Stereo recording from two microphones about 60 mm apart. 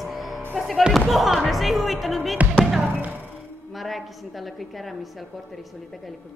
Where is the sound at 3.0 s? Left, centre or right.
Right.